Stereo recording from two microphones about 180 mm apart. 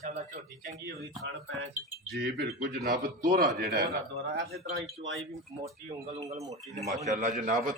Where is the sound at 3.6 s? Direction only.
60° right (ahead or behind).